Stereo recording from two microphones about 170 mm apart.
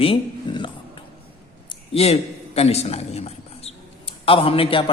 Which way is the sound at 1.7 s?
35° left (ahead or behind).